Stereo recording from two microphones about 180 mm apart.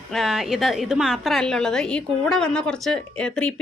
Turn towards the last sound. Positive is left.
turn(degrees=5)  # may be behind; listen again after turning